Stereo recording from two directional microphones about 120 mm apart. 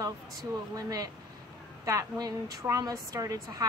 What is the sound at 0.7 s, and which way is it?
A woman's voice, 30° right (ahead or behind).